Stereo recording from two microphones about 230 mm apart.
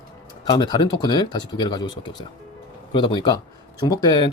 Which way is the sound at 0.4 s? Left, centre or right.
Centre.